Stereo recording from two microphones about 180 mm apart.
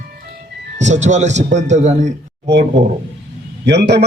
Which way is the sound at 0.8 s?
40° right (ahead or behind).